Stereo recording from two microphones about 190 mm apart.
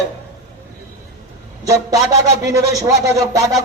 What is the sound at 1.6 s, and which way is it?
A man's voice, 20° right (ahead or behind).